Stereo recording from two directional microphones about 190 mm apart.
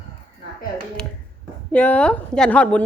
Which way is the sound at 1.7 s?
5° left (ahead or behind).